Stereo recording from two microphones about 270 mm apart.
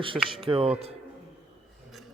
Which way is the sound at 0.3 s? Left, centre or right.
Centre.